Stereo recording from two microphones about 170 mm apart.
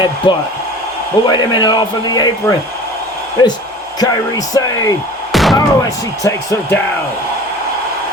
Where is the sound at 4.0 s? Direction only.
25° left (ahead or behind).